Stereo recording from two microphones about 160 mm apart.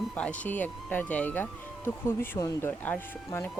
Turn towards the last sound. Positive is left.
turn(degrees=15)  # may be behind; listen again after turning